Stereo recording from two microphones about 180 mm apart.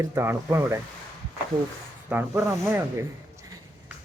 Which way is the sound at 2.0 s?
10° right (ahead or behind).